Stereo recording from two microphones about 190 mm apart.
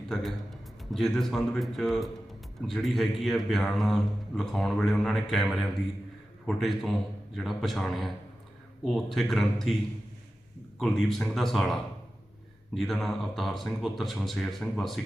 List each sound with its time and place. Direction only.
0.1 s a man's voice: centre (ahead or behind)
10.8 s a man's voice: centre (ahead or behind)